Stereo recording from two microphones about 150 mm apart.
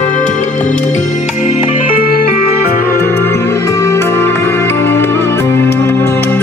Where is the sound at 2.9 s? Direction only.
15° left (ahead or behind).